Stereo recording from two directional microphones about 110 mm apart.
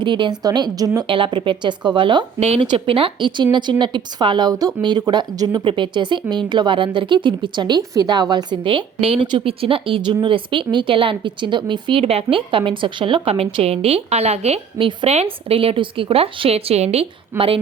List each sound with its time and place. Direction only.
0.0 s a woman's voice: 45° right (ahead or behind)
1.0 s speech: 50° right (ahead or behind); by 5.6 s 35° right (ahead or behind)
5.6 s speech: 50° right (ahead or behind)
9.2 s a woman's voice: 50° right (ahead or behind)